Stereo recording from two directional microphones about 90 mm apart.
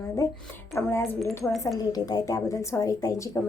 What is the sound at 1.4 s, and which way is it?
Speech, centre (ahead or behind).